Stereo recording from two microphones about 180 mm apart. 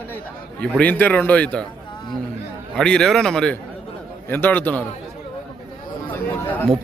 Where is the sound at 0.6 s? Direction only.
10° left (ahead or behind).